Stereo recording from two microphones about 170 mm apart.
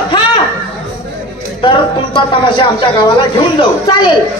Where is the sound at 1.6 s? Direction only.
30° left (ahead or behind).